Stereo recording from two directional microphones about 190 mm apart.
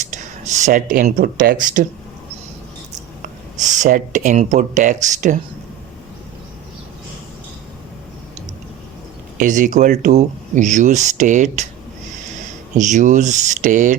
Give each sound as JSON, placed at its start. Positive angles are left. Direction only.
{"t": 0.1, "sound": "speech", "side_deg": -40}
{"t": 3.6, "sound": "speech", "side_deg": -40}
{"t": 9.4, "sound": "speech", "side_deg": -40}
{"t": 12.7, "sound": "speech", "side_deg": -40}